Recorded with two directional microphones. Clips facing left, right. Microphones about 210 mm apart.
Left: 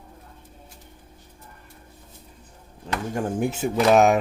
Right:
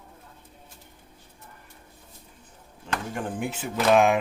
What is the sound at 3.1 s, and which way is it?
Speech, 40° left (ahead or behind).